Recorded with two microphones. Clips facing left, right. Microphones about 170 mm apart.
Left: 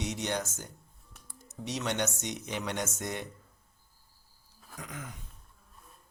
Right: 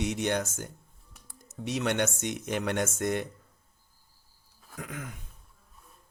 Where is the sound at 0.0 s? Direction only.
55° right (ahead or behind).